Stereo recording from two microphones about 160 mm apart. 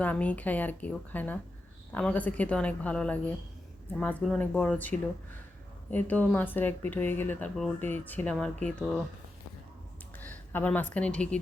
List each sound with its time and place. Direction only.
0.0 s speech: 10° left (ahead or behind)
10.2 s speech: 10° left (ahead or behind)